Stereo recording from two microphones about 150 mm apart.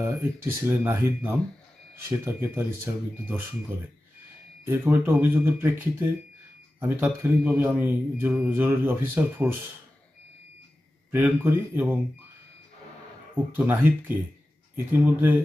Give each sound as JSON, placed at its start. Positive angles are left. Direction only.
{"t": 0.0, "sound": "speech", "side_deg": -15}
{"t": 7.2, "sound": "speech", "side_deg": -15}
{"t": 11.1, "sound": "speech", "side_deg": -15}
{"t": 13.4, "sound": "speech", "side_deg": -10}